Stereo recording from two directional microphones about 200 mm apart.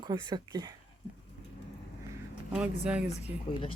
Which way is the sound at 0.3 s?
20° right (ahead or behind).